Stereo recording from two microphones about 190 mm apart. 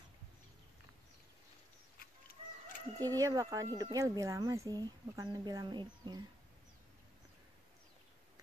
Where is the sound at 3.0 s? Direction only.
20° right (ahead or behind).